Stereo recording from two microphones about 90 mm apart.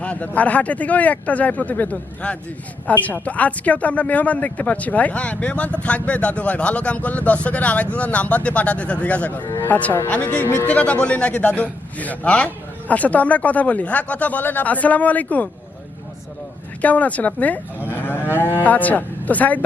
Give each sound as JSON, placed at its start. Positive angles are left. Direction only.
{"t": 0.0, "sound": "a woman's voice", "side_deg": 15}
{"t": 9.5, "sound": "music", "side_deg": 25}
{"t": 9.7, "sound": "a woman's voice", "side_deg": 15}
{"t": 16.8, "sound": "a woman's voice", "side_deg": 15}